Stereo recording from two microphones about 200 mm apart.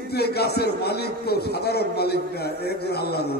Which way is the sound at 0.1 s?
55° left (ahead or behind).